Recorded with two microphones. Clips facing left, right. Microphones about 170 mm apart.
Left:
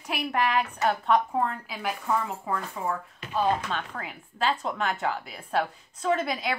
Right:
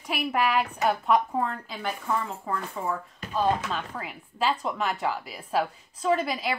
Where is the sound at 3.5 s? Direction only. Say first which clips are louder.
Right 1 dB; 5° right (ahead or behind).